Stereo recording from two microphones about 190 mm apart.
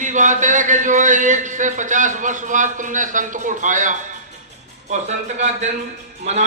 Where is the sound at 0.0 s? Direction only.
40° right (ahead or behind).